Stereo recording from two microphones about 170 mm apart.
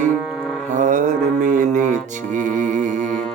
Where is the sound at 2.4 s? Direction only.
50° right (ahead or behind).